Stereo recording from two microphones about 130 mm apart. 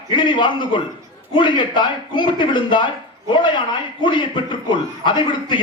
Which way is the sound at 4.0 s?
40° left (ahead or behind).